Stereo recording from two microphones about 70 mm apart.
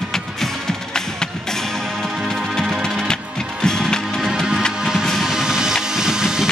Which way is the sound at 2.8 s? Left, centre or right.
Centre.